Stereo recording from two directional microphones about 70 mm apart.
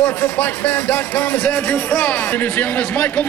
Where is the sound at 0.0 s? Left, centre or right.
Centre.